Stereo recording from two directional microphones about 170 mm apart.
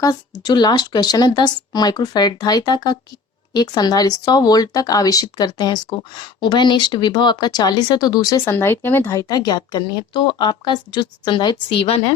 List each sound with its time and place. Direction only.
0.0 s speech: 25° left (ahead or behind)